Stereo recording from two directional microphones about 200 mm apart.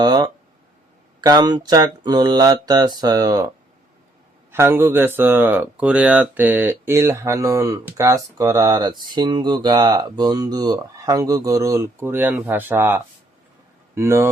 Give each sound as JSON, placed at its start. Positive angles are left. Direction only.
{"t": 0.0, "sound": "speech", "side_deg": -20}
{"t": 4.5, "sound": "speech", "side_deg": -10}